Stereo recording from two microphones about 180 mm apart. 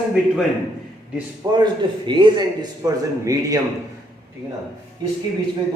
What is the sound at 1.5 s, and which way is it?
A man's voice, 25° right (ahead or behind).